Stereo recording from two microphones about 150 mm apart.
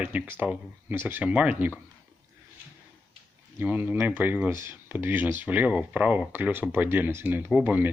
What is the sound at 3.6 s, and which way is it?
Speech, 10° right (ahead or behind).